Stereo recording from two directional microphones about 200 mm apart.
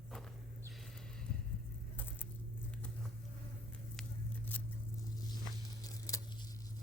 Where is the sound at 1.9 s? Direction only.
10° left (ahead or behind).